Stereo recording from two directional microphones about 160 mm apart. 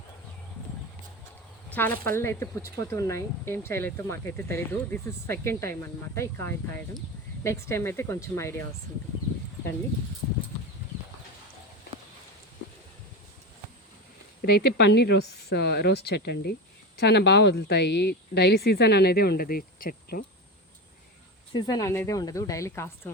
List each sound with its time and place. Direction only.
1.7 s speech: 10° left (ahead or behind)
14.4 s speech: 90° left; by 20.2 s 65° left (ahead or behind)
21.5 s speech: 20° left (ahead or behind)